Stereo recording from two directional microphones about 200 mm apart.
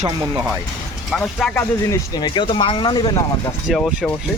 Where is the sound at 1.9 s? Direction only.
20° left (ahead or behind).